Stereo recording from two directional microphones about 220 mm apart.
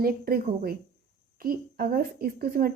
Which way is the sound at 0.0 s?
45° right (ahead or behind).